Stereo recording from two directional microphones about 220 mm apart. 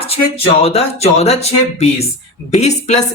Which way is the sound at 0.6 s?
30° left (ahead or behind).